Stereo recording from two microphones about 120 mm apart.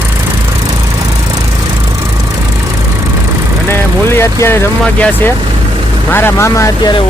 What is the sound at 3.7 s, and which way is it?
Speech, 20° left (ahead or behind).